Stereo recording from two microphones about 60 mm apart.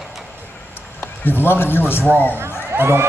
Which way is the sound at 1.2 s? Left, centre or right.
Left.